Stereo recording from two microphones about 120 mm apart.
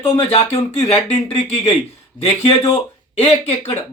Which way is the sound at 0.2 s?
55° left (ahead or behind).